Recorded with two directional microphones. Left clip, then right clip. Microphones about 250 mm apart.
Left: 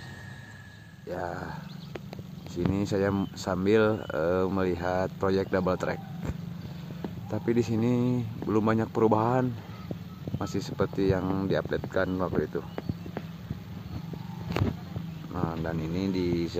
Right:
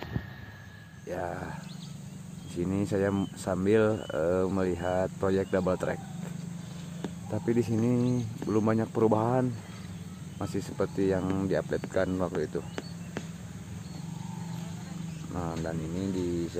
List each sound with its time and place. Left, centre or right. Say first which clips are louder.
1.1 s speech: left 1 dB; centre
2.7 s speech: left 1 dB; centre
7.2 s speech: left 1 dB; centre
15.3 s speech: left 2 dB; centre
16.0 s speech: left 3 dB; centre